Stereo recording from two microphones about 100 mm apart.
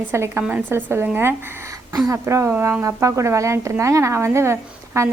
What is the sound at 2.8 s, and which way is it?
A woman's voice, 30° right (ahead or behind).